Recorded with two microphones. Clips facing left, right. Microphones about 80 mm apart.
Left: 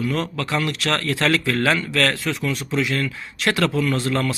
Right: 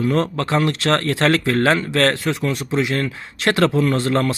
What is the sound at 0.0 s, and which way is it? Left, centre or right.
A man's voice, right.